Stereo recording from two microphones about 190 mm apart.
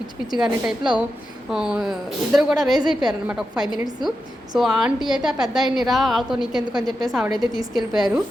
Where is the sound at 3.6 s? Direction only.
20° right (ahead or behind).